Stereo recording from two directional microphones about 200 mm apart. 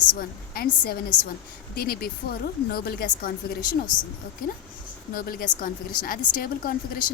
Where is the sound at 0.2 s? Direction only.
50° left (ahead or behind).